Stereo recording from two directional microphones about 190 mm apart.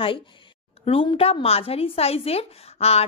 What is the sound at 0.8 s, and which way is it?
A woman's voice, 30° left (ahead or behind).